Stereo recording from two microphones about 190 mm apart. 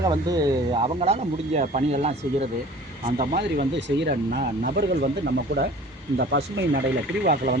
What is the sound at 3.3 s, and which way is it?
Speech, 55° right (ahead or behind).